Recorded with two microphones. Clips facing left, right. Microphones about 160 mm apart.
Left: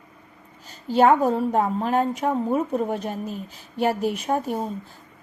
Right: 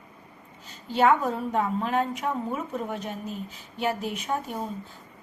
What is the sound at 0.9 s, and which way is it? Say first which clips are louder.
A woman's voice: left 5 dB; 35° left (ahead or behind).